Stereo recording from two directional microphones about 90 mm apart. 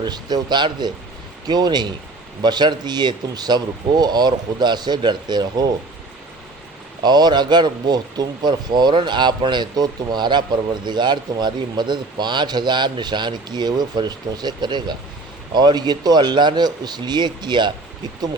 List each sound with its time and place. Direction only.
0.0 s speech: 50° right (ahead or behind)
7.0 s speech: 50° right (ahead or behind)